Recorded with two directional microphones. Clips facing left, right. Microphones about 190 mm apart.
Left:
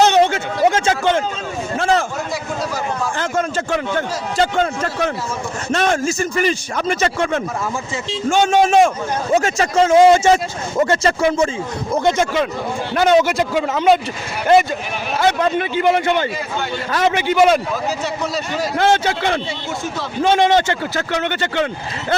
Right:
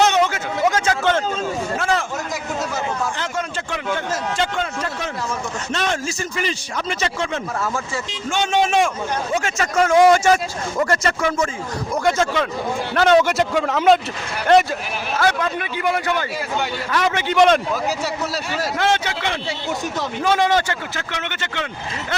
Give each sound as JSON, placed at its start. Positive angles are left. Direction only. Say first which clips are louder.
{"t": 0.0, "sound": "a sound", "louder": "left 4 dB", "side_deg": 30}
{"t": 1.8, "sound": "speech", "louder": "left 6 dB", "side_deg": 35}
{"t": 3.2, "sound": "a man's voice", "louder": "left 6 dB", "side_deg": 45}
{"t": 15.2, "sound": "speech", "louder": "left 4 dB", "side_deg": 25}
{"t": 17.2, "sound": "speech", "louder": "left 1 dB", "side_deg": 10}
{"t": 18.8, "sound": "speech", "louder": "left 6 dB", "side_deg": 35}
{"t": 20.2, "sound": "speech", "louder": "left 4 dB", "side_deg": 25}
{"t": 20.9, "sound": "speech", "louder": "left 8 dB", "side_deg": 40}